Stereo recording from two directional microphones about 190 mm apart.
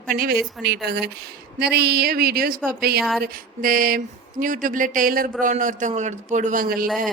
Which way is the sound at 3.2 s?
50° right (ahead or behind).